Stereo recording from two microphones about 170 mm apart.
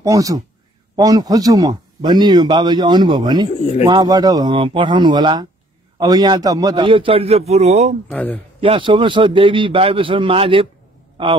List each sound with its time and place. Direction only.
0.0 s a man's voice: 20° right (ahead or behind); by 7.9 s 40° right (ahead or behind)
8.1 s speech: 10° left (ahead or behind)
8.5 s a man's voice: 30° right (ahead or behind)